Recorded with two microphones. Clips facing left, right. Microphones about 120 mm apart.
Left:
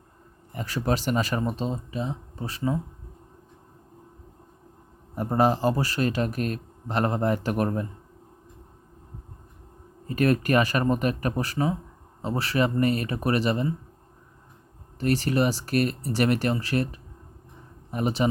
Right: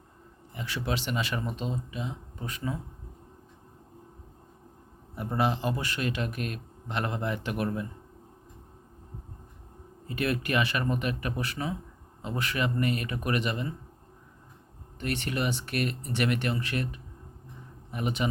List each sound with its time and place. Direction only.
0.5 s speech: 40° left (ahead or behind)
5.1 s speech: 40° left (ahead or behind)
10.1 s speech: 40° left (ahead or behind)
14.9 s speech: 35° left (ahead or behind)